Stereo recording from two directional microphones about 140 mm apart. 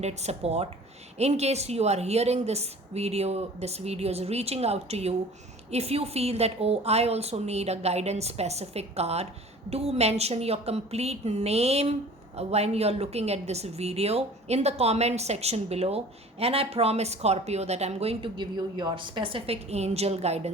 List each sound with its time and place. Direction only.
0.0 s speech: 50° right (ahead or behind)